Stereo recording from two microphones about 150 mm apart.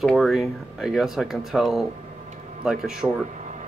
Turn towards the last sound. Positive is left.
turn(degrees=0)  # may be behind; listen again after turning